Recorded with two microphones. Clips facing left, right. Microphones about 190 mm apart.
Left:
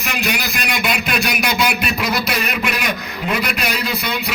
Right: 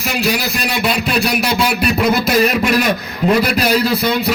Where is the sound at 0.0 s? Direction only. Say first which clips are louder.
Right 5 dB; 35° right (ahead or behind).